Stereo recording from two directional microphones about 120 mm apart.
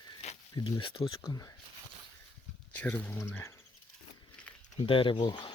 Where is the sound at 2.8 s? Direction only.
15° left (ahead or behind).